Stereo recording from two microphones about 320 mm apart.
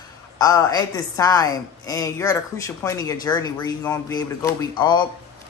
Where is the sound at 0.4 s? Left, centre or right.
Centre.